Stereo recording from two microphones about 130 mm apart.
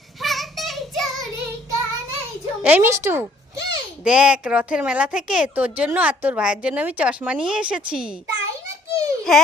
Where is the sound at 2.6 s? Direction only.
10° right (ahead or behind).